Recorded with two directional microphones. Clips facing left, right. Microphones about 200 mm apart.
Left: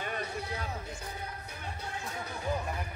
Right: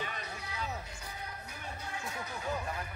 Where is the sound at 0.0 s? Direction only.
50° left (ahead or behind).